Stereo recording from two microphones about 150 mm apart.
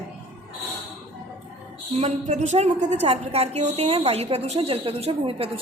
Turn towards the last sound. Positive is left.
turn(degrees=-40)  # may be behind; listen again after turning